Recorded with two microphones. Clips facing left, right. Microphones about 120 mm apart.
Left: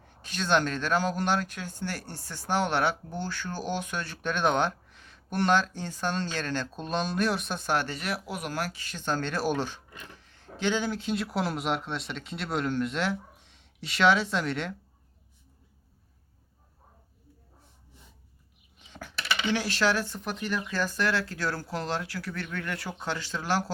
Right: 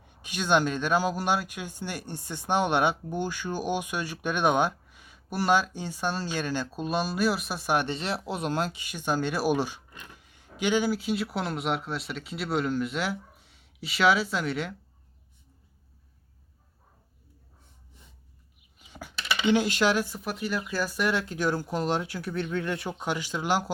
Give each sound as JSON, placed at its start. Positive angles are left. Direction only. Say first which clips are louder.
{"t": 0.0, "sound": "speech", "louder": "right 1 dB", "side_deg": -15}
{"t": 18.8, "sound": "speech", "louder": "left 1 dB", "side_deg": -10}